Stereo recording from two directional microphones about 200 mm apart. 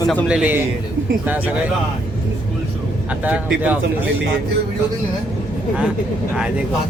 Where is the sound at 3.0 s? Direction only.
5° right (ahead or behind).